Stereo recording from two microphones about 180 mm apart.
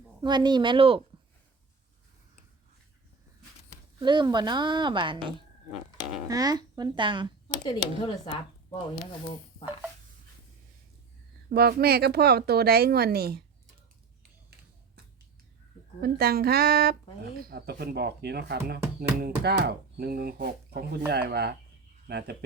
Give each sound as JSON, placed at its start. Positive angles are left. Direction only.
{"t": 0.2, "sound": "a woman's voice", "side_deg": -25}
{"t": 4.0, "sound": "a woman's voice", "side_deg": -25}
{"t": 6.2, "sound": "a woman's voice", "side_deg": -20}
{"t": 7.6, "sound": "speech", "side_deg": 25}
{"t": 11.4, "sound": "speech", "side_deg": -60}
{"t": 16.0, "sound": "speech", "side_deg": -60}